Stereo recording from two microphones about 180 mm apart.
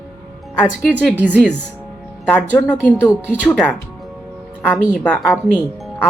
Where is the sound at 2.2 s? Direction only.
5° left (ahead or behind).